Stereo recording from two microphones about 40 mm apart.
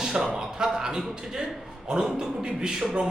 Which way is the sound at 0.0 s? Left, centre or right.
Centre.